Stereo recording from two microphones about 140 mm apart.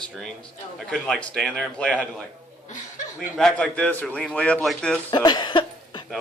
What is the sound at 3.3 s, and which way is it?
Speech, 5° left (ahead or behind).